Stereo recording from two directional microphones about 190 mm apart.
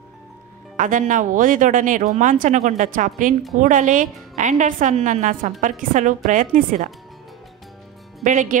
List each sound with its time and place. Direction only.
0.7 s speech: 40° right (ahead or behind)
8.2 s speech: 40° right (ahead or behind)